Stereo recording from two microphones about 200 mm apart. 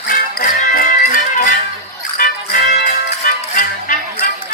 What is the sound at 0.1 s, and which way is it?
Music, 45° left (ahead or behind).